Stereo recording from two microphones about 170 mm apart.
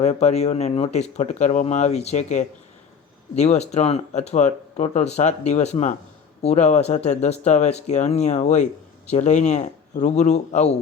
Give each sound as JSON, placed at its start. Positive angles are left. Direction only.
{"t": 0.0, "sound": "a man's voice", "side_deg": 40}